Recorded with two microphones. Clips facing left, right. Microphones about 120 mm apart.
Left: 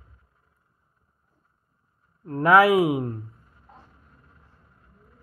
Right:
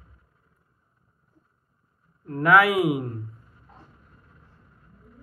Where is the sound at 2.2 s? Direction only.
30° left (ahead or behind).